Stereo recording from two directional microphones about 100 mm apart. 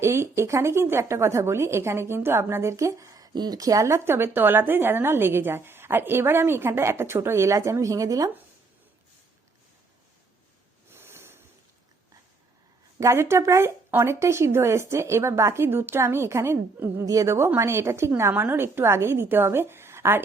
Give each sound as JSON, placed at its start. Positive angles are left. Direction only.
{"t": 0.0, "sound": "a woman's voice", "side_deg": -25}
{"t": 10.9, "sound": "a sound", "side_deg": -25}
{"t": 13.0, "sound": "a woman's voice", "side_deg": -30}